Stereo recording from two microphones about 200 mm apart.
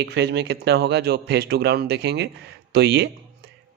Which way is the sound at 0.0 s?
60° right (ahead or behind).